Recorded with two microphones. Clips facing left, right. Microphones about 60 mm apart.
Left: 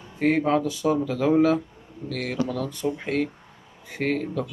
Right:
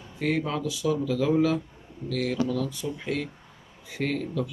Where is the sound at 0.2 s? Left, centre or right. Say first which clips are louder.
Left 6 dB; left.